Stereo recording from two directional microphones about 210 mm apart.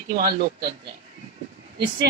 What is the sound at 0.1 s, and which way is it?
Speech, 45° right (ahead or behind).